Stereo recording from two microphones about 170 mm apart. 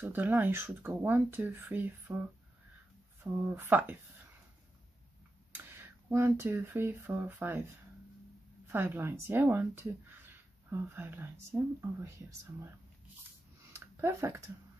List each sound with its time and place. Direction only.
0.0 s speech: 10° right (ahead or behind)
3.4 s speech: 10° right (ahead or behind)
5.5 s speech: 15° right (ahead or behind)
8.6 s speech: 15° right (ahead or behind)
13.7 s a sound: 15° right (ahead or behind)